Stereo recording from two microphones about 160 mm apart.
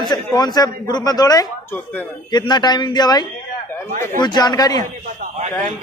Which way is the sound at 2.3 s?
25° left (ahead or behind).